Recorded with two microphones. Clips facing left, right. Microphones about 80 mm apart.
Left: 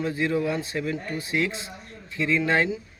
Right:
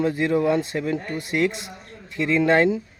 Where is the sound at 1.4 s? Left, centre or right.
Right.